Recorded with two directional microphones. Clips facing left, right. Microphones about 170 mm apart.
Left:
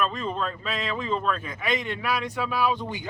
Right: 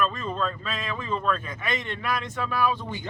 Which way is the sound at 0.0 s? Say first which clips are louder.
Even; 20° left (ahead or behind).